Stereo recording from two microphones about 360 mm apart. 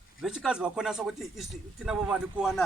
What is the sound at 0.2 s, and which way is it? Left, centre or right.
Speech, centre.